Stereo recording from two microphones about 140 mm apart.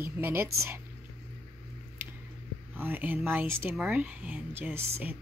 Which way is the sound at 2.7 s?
15° right (ahead or behind).